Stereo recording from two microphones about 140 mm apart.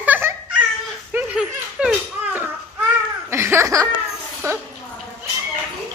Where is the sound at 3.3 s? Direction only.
20° right (ahead or behind).